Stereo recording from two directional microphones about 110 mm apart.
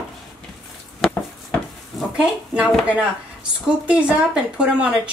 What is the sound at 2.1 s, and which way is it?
Speech, 5° right (ahead or behind).